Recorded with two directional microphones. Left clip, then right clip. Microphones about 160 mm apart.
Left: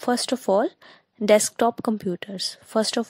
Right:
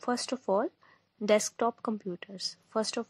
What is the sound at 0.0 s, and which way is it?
A woman's voice, 40° left (ahead or behind).